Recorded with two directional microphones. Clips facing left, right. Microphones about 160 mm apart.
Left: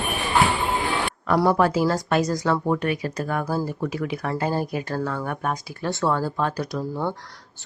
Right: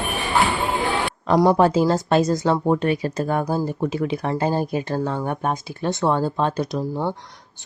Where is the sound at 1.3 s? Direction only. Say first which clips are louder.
Right 3 dB; 20° right (ahead or behind).